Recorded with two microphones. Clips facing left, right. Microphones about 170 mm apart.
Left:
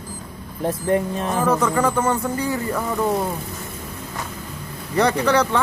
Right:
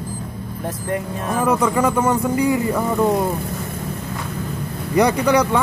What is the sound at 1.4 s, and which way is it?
Speech, 10° right (ahead or behind).